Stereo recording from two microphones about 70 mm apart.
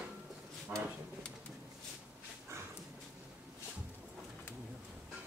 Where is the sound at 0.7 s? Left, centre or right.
Right.